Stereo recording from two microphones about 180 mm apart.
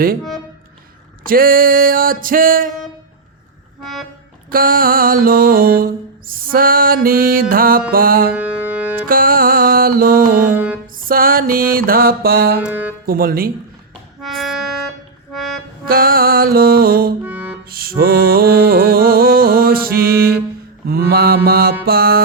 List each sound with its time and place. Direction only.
0.2 s music: centre (ahead or behind)
1.2 s mantra: 55° right (ahead or behind)
3.8 s music: centre (ahead or behind)
4.4 s mantra: 50° right (ahead or behind)
8.3 s music: 5° right (ahead or behind)
9.0 s music: 50° right (ahead or behind)
10.5 s music: 10° right (ahead or behind)
10.9 s mantra: 50° right (ahead or behind)
12.5 s speech: 10° right (ahead or behind)
13.1 s music: 55° right (ahead or behind)
14.2 s music: centre (ahead or behind)
15.9 s music: 55° right (ahead or behind)
17.2 s music: 10° right (ahead or behind)
17.7 s music: 55° right (ahead or behind)